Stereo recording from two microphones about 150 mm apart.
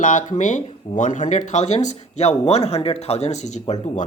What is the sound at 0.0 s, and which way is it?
Speech, 60° left (ahead or behind).